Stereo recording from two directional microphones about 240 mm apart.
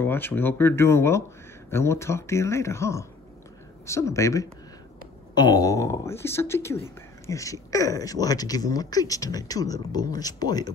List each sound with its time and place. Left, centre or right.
0.0 s speech: centre